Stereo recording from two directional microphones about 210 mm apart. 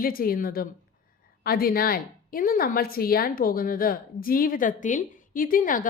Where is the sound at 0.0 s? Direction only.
45° left (ahead or behind).